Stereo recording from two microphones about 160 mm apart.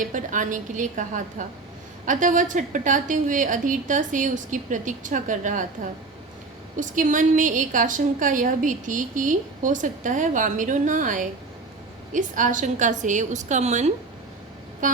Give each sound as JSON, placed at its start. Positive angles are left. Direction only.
{"t": 0.0, "sound": "a woman's voice", "side_deg": -55}
{"t": 14.8, "sound": "vehicle", "side_deg": -55}